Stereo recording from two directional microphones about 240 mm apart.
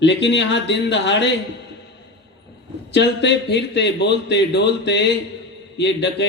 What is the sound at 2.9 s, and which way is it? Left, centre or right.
Speech, left.